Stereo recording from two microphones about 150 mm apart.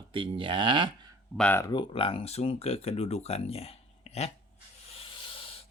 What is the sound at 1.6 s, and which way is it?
Speech, 35° left (ahead or behind).